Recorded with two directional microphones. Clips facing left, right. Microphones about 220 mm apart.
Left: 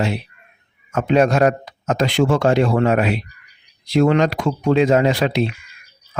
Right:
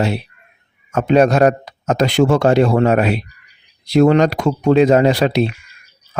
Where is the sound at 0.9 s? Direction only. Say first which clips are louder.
Right 3 dB; 40° right (ahead or behind).